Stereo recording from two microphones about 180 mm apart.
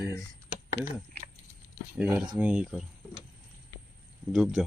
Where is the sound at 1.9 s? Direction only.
5° right (ahead or behind).